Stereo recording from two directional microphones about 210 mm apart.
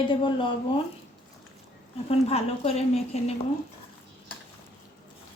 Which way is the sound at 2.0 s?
30° left (ahead or behind).